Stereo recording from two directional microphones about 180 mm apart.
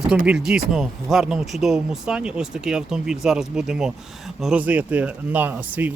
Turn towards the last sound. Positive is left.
turn(degrees=-10)  # may be behind; listen again after turning